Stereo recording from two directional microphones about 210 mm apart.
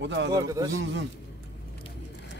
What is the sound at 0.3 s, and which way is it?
Speech, 15° right (ahead or behind).